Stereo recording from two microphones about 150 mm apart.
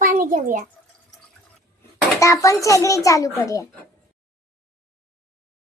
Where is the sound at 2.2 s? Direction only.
20° left (ahead or behind).